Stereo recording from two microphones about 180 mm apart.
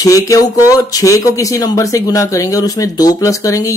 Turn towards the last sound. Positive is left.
turn(degrees=20)  # may be behind; listen again after turning